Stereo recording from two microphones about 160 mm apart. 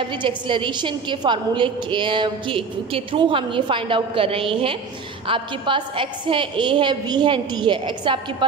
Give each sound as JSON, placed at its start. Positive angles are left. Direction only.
{"t": 0.0, "sound": "a woman's voice", "side_deg": -30}